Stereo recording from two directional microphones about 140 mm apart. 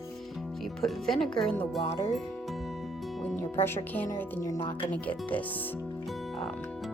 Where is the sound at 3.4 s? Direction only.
15° left (ahead or behind).